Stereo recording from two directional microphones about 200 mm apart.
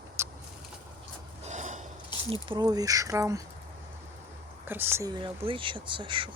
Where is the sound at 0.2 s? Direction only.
15° right (ahead or behind).